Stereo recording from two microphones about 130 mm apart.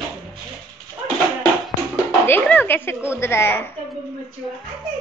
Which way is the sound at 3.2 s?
20° left (ahead or behind).